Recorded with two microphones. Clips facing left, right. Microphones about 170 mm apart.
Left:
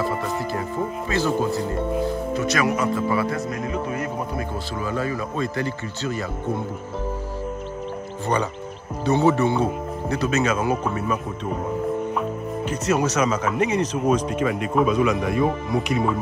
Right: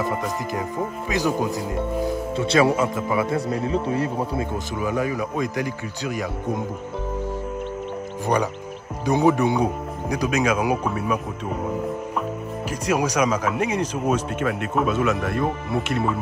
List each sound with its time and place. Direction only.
1.1 s speech: 15° right (ahead or behind)
2.3 s speech: 30° right (ahead or behind)
3.4 s speech: 30° right (ahead or behind)
4.8 s speech: 15° right (ahead or behind)
9.0 s speech: 15° right (ahead or behind)
12.6 s speech: 10° right (ahead or behind)